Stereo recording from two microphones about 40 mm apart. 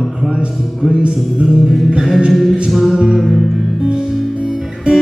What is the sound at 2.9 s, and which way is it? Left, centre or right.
Music, centre.